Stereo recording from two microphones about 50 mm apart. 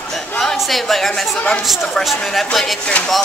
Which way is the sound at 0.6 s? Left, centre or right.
Centre.